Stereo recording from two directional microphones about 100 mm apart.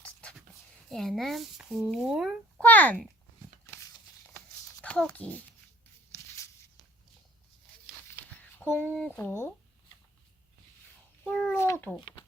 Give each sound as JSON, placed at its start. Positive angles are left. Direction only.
{"t": 0.9, "sound": "speech", "side_deg": 5}
{"t": 2.6, "sound": "a child's voice", "side_deg": 15}
{"t": 4.9, "sound": "a child's voice", "side_deg": 15}
{"t": 6.1, "sound": "a sound", "side_deg": 30}
{"t": 8.4, "sound": "a sound", "side_deg": 15}
{"t": 9.1, "sound": "speech", "side_deg": 25}
{"t": 11.2, "sound": "speech", "side_deg": 10}
{"t": 11.5, "sound": "speech", "side_deg": 25}
{"t": 11.9, "sound": "speech", "side_deg": 55}